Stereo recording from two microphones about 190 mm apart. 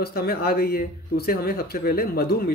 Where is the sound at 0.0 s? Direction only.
55° left (ahead or behind).